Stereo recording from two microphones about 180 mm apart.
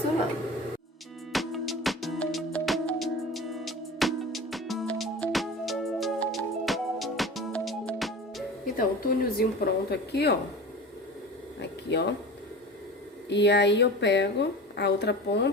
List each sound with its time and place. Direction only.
1.3 s music: centre (ahead or behind)
8.7 s speech: 55° left (ahead or behind)
9.9 s speech: 65° left (ahead or behind)
11.6 s a sound: 70° left (ahead or behind)
13.3 s a woman's voice: 70° left (ahead or behind)